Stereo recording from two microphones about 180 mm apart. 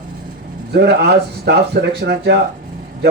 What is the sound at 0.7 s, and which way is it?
Speech, 65° right (ahead or behind).